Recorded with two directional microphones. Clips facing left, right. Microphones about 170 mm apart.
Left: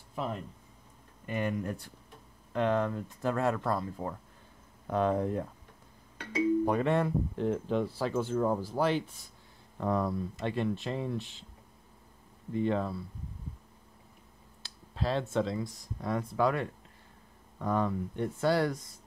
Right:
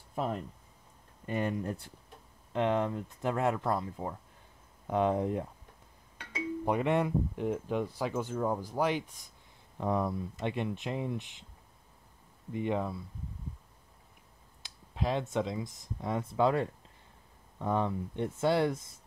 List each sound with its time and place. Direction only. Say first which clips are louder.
0.1 s speech: right 2 dB; 45° right (ahead or behind)
1.2 s speech: even; 30° right (ahead or behind)
6.6 s speech: left 1 dB; 15° right (ahead or behind)
12.5 s speech: left 2 dB; 15° right (ahead or behind)
14.6 s a sound: even; 15° right (ahead or behind)
15.3 s speech: left 2 dB; 20° right (ahead or behind)